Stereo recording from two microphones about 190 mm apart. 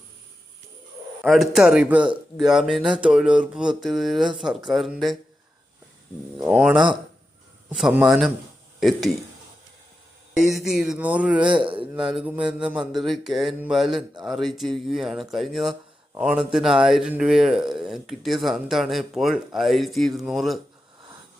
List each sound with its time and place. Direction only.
1.2 s speech: centre (ahead or behind)
6.4 s speech: 5° right (ahead or behind)
10.3 s speech: centre (ahead or behind)
11.5 s speech: 25° right (ahead or behind)
12.1 s speech: 5° right (ahead or behind)